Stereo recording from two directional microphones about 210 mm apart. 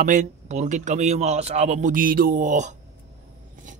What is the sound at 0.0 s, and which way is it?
Speech, 40° right (ahead or behind).